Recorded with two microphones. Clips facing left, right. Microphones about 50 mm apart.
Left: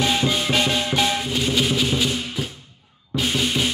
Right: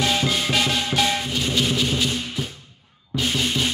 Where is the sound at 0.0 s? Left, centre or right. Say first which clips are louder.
Left 1 dB; left.